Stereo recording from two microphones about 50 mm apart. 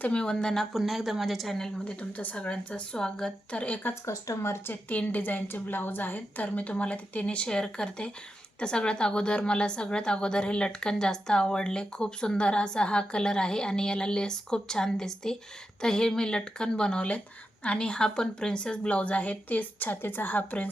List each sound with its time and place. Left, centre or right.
0.1 s a woman's voice: centre
0.7 s a woman's voice: centre
1.5 s a woman's voice: centre
2.0 s a woman's voice: left
4.0 s speech: left
4.7 s a woman's voice: left